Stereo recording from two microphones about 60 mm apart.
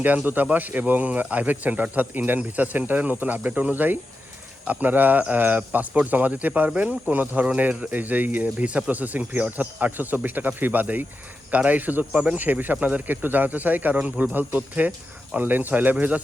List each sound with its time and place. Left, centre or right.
0.0 s speech: right
12.1 s speech: centre
12.4 s speech: right